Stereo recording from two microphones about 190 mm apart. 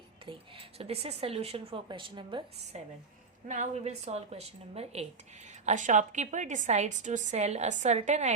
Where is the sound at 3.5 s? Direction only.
35° right (ahead or behind).